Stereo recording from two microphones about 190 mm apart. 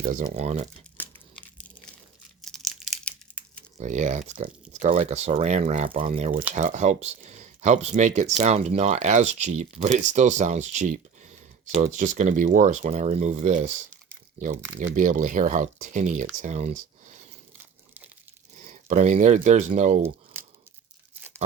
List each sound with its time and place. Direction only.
0.0 s speech: 40° right (ahead or behind)
1.0 s crumpling: 10° left (ahead or behind)
1.5 s a sound: 5° left (ahead or behind)
2.4 s crumpling: centre (ahead or behind)
3.8 s speech: 40° right (ahead or behind)
14.9 s speech: 45° right (ahead or behind)
17.6 s crumpling: 10° right (ahead or behind)
18.6 s speech: 40° right (ahead or behind)